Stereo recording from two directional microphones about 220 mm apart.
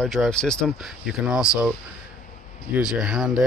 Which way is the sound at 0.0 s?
Centre (ahead or behind).